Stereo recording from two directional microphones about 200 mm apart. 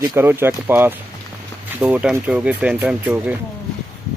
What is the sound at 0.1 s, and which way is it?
Speech, 10° right (ahead or behind).